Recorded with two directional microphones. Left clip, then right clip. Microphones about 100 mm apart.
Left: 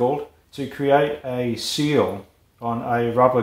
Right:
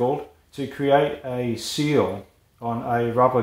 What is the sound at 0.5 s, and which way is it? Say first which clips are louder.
Speech: left 1 dB; 45° right (ahead or behind).